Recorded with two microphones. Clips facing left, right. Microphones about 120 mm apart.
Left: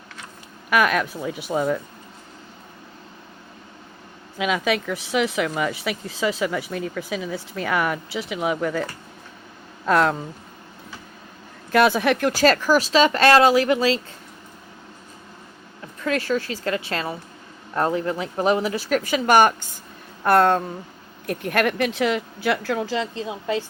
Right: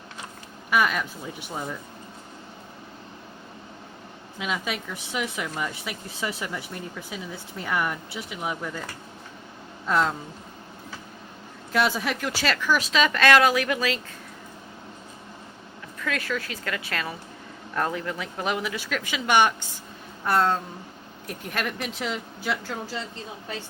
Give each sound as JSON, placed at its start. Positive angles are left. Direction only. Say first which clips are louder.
{"t": 0.7, "sound": "speech", "louder": "left 4 dB", "side_deg": 85}
{"t": 4.4, "sound": "speech", "louder": "left 8 dB", "side_deg": 90}
{"t": 11.7, "sound": "speech", "louder": "left 7 dB", "side_deg": 60}
{"t": 16.0, "sound": "speech", "louder": "left 7 dB", "side_deg": 30}
{"t": 20.2, "sound": "speech", "louder": "left 6 dB", "side_deg": 60}